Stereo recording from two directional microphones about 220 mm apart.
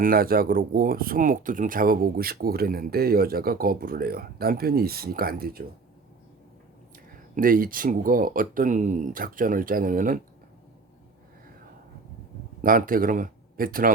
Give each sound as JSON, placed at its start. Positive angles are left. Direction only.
{"t": 0.0, "sound": "speech", "side_deg": -40}
{"t": 7.3, "sound": "speech", "side_deg": -40}
{"t": 12.6, "sound": "speech", "side_deg": -40}